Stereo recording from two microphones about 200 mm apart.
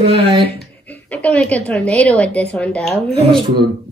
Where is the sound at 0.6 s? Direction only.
5° left (ahead or behind).